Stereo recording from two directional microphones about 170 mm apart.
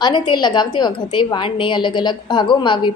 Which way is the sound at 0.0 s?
25° left (ahead or behind).